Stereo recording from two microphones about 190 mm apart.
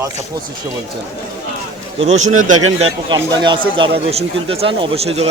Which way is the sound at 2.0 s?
35° right (ahead or behind).